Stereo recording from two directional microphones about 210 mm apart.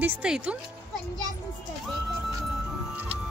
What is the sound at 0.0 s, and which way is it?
Speech, 5° right (ahead or behind).